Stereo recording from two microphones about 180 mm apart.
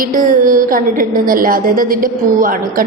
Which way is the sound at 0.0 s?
50° right (ahead or behind).